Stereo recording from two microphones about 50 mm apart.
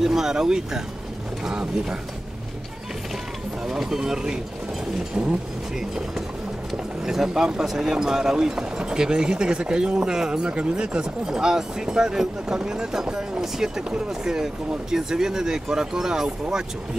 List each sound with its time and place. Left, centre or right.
0.0 s speech: centre
3.6 s speech: centre
5.8 s speech: centre